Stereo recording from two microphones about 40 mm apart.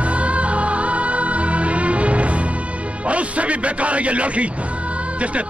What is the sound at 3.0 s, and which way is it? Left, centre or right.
A man's voice, right.